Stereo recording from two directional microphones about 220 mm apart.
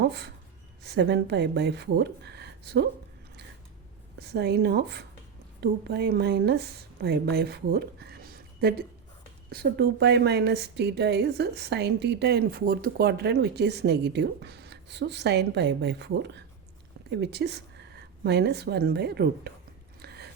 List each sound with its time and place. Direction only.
0.0 s a woman's voice: 50° right (ahead or behind)
4.2 s a woman's voice: 45° right (ahead or behind)
20.0 s a sound: 45° right (ahead or behind)